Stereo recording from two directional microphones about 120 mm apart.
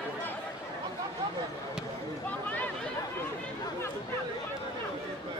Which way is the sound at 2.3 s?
15° left (ahead or behind).